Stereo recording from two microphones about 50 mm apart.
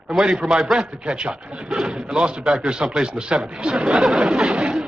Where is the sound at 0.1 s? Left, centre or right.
Centre.